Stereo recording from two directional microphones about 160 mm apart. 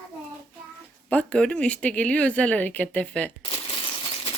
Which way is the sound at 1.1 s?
10° left (ahead or behind).